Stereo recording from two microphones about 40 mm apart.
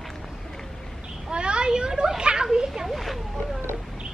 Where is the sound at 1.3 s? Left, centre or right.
Right.